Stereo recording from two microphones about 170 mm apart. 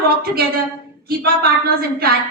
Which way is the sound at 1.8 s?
65° right (ahead or behind).